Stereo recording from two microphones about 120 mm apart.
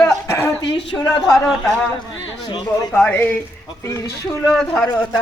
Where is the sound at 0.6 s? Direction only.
50° left (ahead or behind).